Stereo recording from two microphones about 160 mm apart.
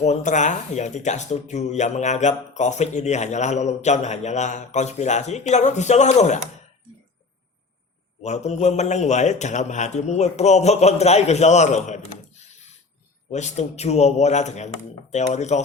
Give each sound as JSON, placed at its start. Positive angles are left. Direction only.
{"t": 0.0, "sound": "speech", "side_deg": 45}
{"t": 8.2, "sound": "speech", "side_deg": 45}